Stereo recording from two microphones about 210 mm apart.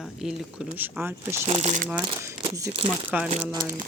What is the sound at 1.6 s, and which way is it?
Speech, 35° right (ahead or behind).